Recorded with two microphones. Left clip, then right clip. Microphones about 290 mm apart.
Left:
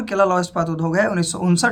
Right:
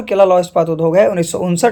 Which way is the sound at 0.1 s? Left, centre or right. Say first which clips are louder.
Right 7 dB; centre.